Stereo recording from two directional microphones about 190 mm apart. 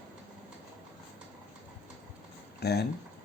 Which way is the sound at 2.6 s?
60° left (ahead or behind).